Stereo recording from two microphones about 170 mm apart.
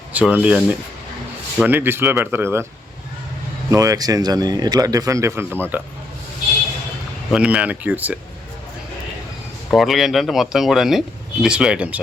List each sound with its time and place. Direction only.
0.1 s a sound: 10° right (ahead or behind)
0.4 s speech: 5° right (ahead or behind)
3.7 s speech: 20° right (ahead or behind)
7.3 s speech: 5° right (ahead or behind)
9.6 s speech: centre (ahead or behind)